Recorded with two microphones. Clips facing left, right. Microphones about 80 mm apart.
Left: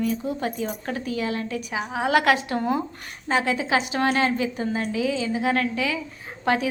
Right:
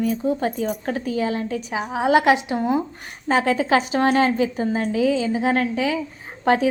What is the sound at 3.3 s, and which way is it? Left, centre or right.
A woman's voice, right.